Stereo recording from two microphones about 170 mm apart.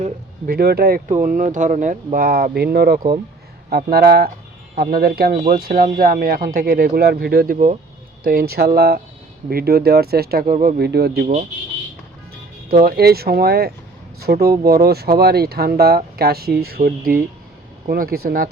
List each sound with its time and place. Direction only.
0.0 s speech: 55° right (ahead or behind)
1.0 s speech: 50° right (ahead or behind)
2.1 s speech: 60° right (ahead or behind)
10.4 s speech: 55° right (ahead or behind); by 11.1 s 70° right (ahead or behind)
12.6 s speech: 65° right (ahead or behind)